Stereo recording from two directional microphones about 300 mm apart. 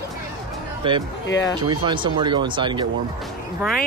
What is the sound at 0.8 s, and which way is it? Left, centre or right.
Speech, centre.